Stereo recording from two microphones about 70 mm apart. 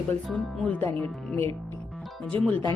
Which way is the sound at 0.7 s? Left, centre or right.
Left.